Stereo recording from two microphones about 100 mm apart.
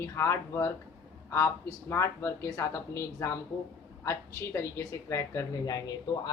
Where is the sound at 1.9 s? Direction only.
25° left (ahead or behind).